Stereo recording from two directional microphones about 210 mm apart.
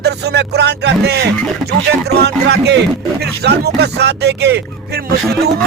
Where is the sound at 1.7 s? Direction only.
50° right (ahead or behind).